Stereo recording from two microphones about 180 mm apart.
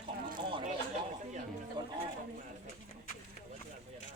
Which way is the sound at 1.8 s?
25° right (ahead or behind).